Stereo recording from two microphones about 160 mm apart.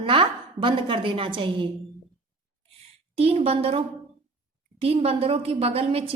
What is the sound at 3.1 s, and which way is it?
A woman's voice, 35° right (ahead or behind).